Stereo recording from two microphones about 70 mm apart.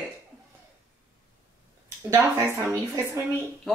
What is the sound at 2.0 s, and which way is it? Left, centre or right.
Speech, right.